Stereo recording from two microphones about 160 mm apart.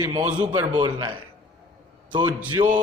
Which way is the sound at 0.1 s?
25° right (ahead or behind).